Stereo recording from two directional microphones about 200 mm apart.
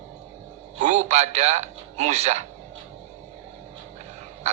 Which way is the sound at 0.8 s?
35° right (ahead or behind).